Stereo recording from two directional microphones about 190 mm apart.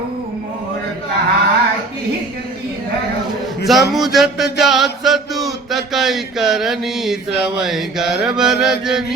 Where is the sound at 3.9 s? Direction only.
Centre (ahead or behind).